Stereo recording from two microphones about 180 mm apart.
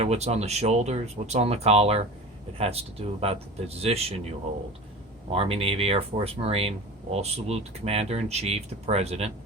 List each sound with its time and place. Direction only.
0.0 s speech: 35° right (ahead or behind)
5.3 s speech: 30° right (ahead or behind)